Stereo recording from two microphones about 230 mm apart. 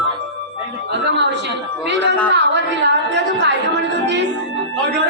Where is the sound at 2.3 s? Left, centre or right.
Right.